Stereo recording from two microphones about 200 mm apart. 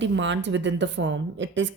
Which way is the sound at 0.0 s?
65° right (ahead or behind).